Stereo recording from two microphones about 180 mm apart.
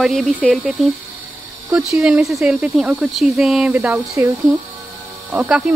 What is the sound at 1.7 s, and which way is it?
Speech, 5° right (ahead or behind).